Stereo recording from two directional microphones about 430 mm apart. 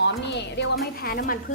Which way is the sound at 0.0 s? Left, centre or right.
Left.